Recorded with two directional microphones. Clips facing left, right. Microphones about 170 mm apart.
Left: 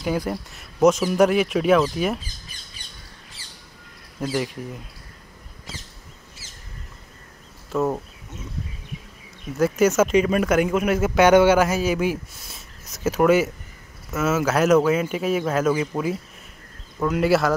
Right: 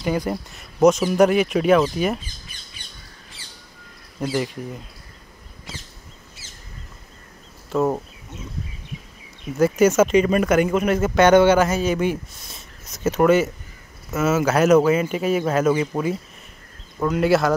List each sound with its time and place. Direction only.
0.0 s speech: centre (ahead or behind)
4.2 s speech: centre (ahead or behind)
7.7 s speech: centre (ahead or behind)
9.6 s speech: centre (ahead or behind)